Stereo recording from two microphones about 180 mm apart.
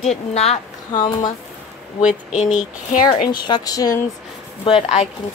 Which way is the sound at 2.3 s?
40° left (ahead or behind).